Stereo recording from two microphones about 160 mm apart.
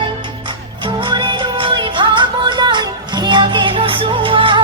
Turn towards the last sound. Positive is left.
turn(degrees=-30)  # may be behind; listen again after turning